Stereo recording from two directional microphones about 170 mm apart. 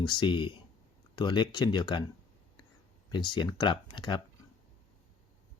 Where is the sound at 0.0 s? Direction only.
25° left (ahead or behind).